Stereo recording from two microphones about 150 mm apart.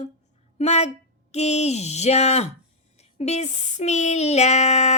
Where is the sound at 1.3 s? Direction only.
45° left (ahead or behind).